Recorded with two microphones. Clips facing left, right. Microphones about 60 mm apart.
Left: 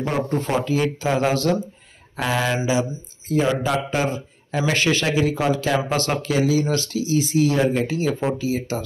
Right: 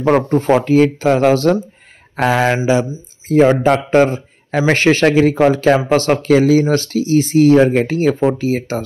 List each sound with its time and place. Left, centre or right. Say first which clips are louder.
0.3 s speech: right 9 dB; right